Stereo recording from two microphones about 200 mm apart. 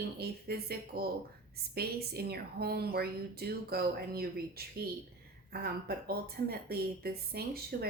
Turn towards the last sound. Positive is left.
turn(degrees=-50)  # may be behind; listen again after turning